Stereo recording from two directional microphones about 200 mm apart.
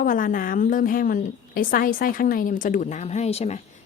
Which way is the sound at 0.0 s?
45° left (ahead or behind).